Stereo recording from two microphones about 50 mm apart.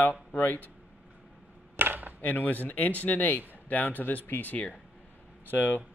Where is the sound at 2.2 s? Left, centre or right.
Left.